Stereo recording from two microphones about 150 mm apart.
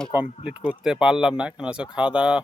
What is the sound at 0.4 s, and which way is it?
Speech, 5° right (ahead or behind).